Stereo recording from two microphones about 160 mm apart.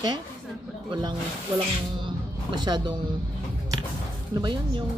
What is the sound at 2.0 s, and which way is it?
Music, 25° right (ahead or behind).